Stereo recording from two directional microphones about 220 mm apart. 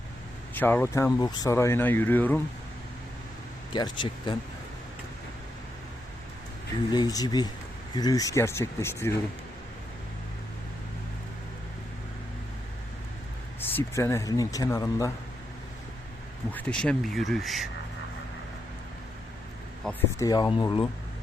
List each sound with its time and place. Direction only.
0.5 s speech: 10° left (ahead or behind)
3.7 s speech: 20° left (ahead or behind)
6.9 s speech: 15° left (ahead or behind)
13.6 s speech: 10° left (ahead or behind)
16.5 s speech: 5° left (ahead or behind)
19.8 s speech: 10° left (ahead or behind)